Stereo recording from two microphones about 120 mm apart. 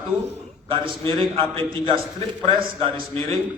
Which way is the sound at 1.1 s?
45° right (ahead or behind).